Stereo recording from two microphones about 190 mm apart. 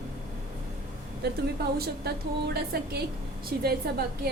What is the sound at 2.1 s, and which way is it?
A woman's voice, 55° right (ahead or behind).